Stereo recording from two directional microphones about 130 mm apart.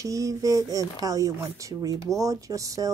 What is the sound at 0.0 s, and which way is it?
Speech, 25° right (ahead or behind).